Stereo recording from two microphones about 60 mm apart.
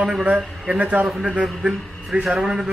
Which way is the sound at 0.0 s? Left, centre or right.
Centre.